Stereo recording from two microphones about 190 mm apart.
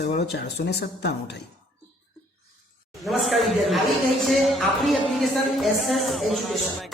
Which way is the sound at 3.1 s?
Centre (ahead or behind).